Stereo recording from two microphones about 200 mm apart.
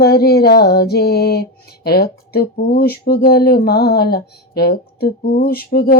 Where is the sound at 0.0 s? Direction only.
50° left (ahead or behind).